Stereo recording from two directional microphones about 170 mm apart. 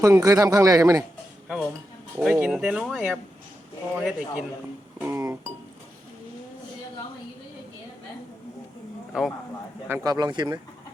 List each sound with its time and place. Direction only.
0.0 s speech: 20° right (ahead or behind)
2.1 s speech: 10° right (ahead or behind)
4.9 s music: 15° right (ahead or behind)
9.1 s speech: 5° right (ahead or behind)
9.9 s speech: 20° right (ahead or behind)